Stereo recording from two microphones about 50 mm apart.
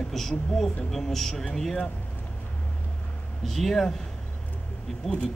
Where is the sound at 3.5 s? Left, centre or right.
Centre.